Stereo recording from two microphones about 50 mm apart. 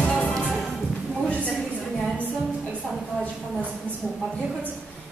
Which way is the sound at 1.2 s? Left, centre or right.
Left.